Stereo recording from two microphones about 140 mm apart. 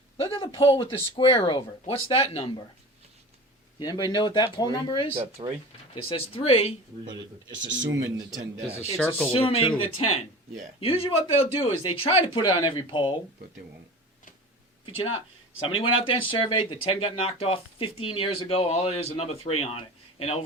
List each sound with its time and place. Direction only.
0.2 s speech: 40° left (ahead or behind)
3.8 s speech: 30° left (ahead or behind)
5.1 s speech: 40° right (ahead or behind)
5.9 s speech: 40° left (ahead or behind)
7.9 s speech: 25° right (ahead or behind)
9.0 s speech: 15° left (ahead or behind)
9.3 s speech: 40° left (ahead or behind)
15.6 s speech: 40° left (ahead or behind)